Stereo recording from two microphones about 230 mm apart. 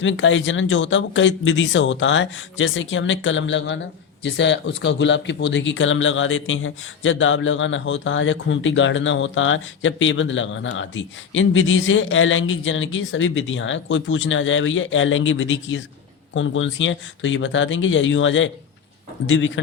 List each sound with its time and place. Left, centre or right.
0.0 s speech: left